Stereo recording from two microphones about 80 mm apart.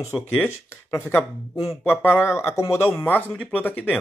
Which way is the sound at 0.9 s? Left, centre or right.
Left.